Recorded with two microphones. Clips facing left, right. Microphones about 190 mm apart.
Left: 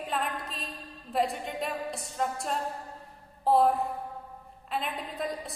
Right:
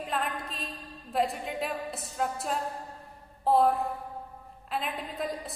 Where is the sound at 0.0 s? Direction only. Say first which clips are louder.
Even; centre (ahead or behind).